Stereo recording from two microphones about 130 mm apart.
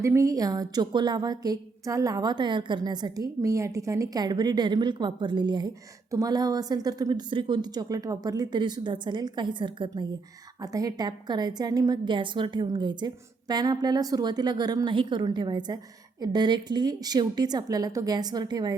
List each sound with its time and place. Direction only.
0.0 s a woman's voice: 25° right (ahead or behind)